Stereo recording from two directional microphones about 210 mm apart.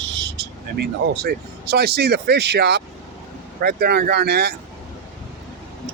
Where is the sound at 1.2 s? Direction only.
50° right (ahead or behind).